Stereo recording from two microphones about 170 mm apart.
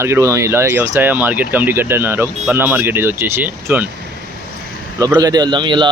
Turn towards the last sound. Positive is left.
turn(degrees=-30)  # may be behind; listen again after turning